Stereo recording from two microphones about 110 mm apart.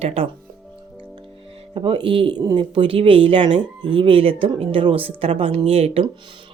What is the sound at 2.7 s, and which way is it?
Speech, 50° right (ahead or behind).